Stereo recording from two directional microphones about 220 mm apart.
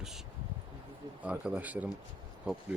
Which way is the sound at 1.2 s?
5° right (ahead or behind).